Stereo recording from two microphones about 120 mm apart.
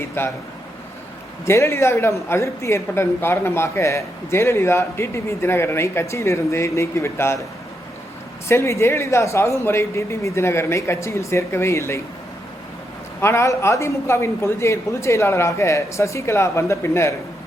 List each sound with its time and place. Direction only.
0.2 s a woman's voice: 20° left (ahead or behind)
1.5 s a woman's voice: 25° left (ahead or behind)
8.4 s a woman's voice: 25° left (ahead or behind)
13.2 s a woman's voice: 25° left (ahead or behind)